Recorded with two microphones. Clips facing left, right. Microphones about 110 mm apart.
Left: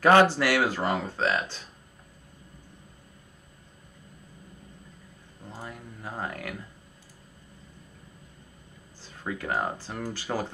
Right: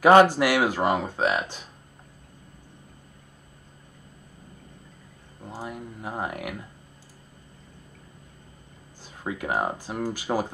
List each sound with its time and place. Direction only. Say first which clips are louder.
0.0 s speech: right 4 dB; 15° right (ahead or behind)
5.4 s a sound: right 5 dB; 25° right (ahead or behind)
5.7 s speech: right 5 dB; 15° right (ahead or behind)
9.0 s speech: right 2 dB; 15° right (ahead or behind)